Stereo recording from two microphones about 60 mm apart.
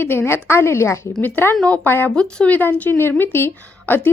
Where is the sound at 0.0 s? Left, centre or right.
Left.